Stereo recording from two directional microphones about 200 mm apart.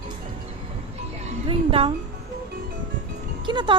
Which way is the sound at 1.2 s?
30° right (ahead or behind).